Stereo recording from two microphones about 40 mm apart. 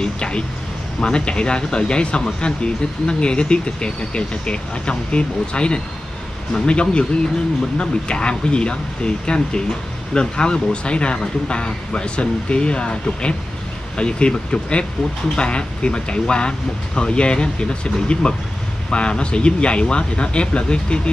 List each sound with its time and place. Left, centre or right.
0.0 s speech: left